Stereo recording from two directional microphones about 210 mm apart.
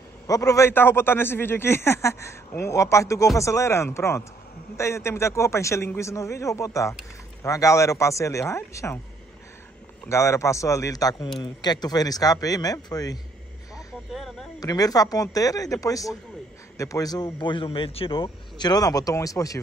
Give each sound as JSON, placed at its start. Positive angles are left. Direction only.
{"t": 0.3, "sound": "a man's voice", "side_deg": 15}
{"t": 10.0, "sound": "a man's voice", "side_deg": 15}
{"t": 14.6, "sound": "a man's voice", "side_deg": 15}